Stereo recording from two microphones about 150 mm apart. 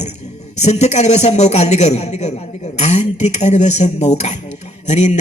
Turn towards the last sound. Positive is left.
turn(degrees=50)  # may be behind; listen again after turning